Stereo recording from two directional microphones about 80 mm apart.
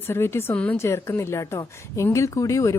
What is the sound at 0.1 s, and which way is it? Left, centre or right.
Speech, left.